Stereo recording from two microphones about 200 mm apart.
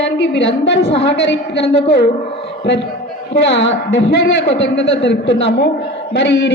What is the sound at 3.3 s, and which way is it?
A man's voice, 60° left (ahead or behind).